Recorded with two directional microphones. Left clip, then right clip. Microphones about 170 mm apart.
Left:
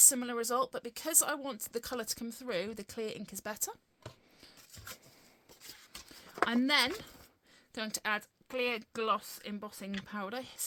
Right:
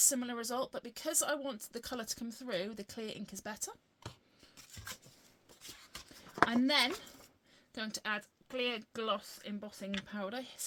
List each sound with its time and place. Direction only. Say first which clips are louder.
0.0 s speech: left 4 dB; 45° left (ahead or behind)
5.7 s a sound: even; 25° left (ahead or behind)
6.5 s speech: left 2 dB; 45° left (ahead or behind)